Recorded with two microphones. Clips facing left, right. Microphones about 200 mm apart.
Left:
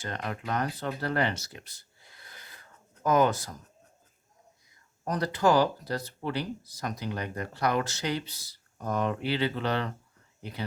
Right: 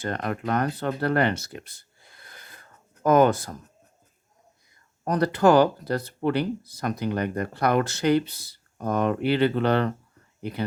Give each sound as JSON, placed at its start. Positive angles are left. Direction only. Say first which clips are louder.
{"t": 0.0, "sound": "speech", "louder": "right 7 dB", "side_deg": -55}
{"t": 5.0, "sound": "speech", "louder": "right 6 dB", "side_deg": -60}